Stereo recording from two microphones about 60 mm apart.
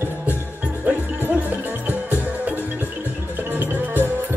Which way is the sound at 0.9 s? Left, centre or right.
Right.